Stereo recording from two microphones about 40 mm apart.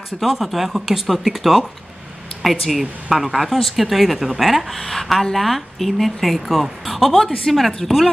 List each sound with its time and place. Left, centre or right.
0.2 s speech: centre
2.7 s speech: centre